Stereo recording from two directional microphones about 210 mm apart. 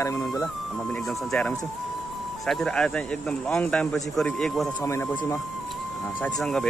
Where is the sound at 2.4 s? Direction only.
5° left (ahead or behind).